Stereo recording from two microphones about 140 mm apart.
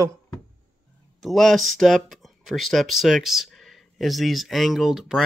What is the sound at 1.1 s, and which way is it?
Speech, centre (ahead or behind).